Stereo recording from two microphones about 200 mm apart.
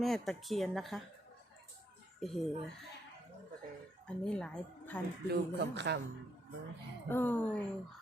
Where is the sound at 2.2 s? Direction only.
Centre (ahead or behind).